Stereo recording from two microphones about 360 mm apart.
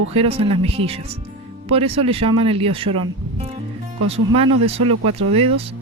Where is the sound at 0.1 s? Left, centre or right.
Centre.